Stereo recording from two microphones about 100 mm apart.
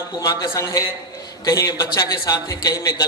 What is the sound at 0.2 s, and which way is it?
A man's voice, 30° left (ahead or behind).